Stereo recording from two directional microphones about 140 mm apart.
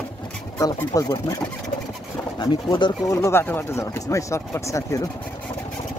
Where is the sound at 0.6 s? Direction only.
25° left (ahead or behind).